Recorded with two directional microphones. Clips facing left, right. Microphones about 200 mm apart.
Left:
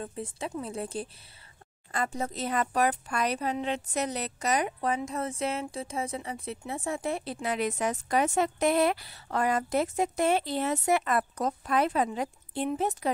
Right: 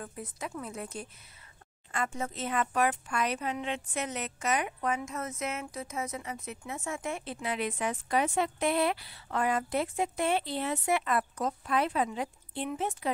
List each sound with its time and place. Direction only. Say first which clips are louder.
0.0 s a woman's voice: left 4 dB; 25° left (ahead or behind)